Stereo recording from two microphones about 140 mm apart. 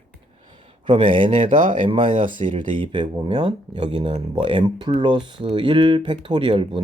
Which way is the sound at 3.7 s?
40° right (ahead or behind).